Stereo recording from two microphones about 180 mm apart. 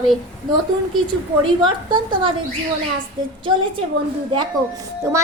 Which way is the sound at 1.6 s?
25° right (ahead or behind).